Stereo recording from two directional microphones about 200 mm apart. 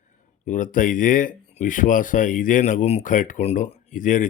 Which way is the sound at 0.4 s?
40° left (ahead or behind).